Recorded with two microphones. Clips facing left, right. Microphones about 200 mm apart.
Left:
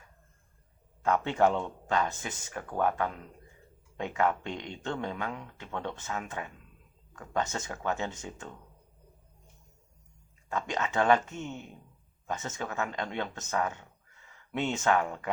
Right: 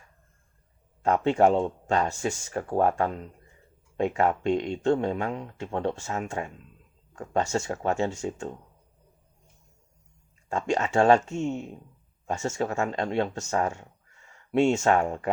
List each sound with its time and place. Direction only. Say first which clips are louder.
1.0 s speech: right 5 dB; 30° right (ahead or behind)
10.5 s speech: right 6 dB; 30° right (ahead or behind)